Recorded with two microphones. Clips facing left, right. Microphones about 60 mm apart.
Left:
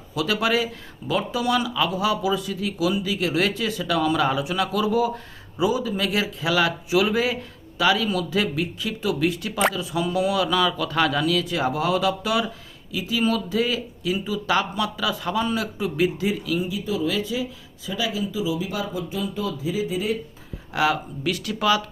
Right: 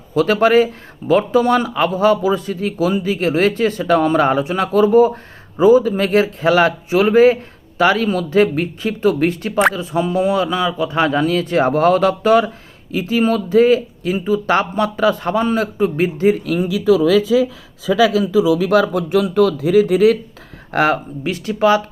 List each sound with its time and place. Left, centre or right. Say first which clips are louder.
0.1 s speech: right 10 dB; right
16.6 s speech: right 12 dB; right
20.7 s speech: right 6 dB; right